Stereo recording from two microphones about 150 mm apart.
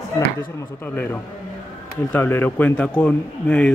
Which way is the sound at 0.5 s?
15° left (ahead or behind).